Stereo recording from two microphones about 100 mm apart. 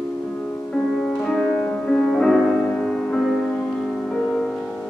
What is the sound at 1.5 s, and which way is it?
Music, 15° left (ahead or behind).